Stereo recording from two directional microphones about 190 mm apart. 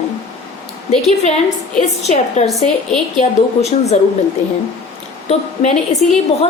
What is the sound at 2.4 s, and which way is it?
Speech, centre (ahead or behind).